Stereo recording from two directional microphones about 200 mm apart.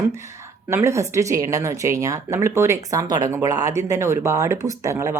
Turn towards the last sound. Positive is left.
turn(degrees=-15)  # may be behind; listen again after turning